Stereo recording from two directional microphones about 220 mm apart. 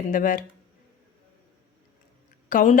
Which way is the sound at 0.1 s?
35° left (ahead or behind).